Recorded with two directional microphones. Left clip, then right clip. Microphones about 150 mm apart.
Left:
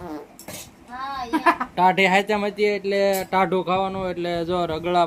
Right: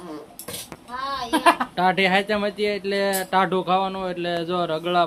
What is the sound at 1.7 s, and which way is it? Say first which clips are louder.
Speech: left 2 dB; 15° left (ahead or behind).